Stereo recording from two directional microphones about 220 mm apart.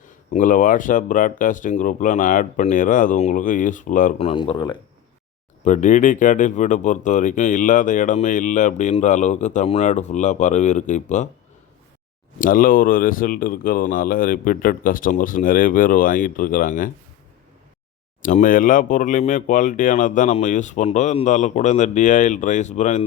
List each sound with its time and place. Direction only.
0.3 s speech: 35° left (ahead or behind)
5.6 s speech: 35° left (ahead or behind)
12.4 s speech: 40° left (ahead or behind)
18.2 s speech: 35° left (ahead or behind)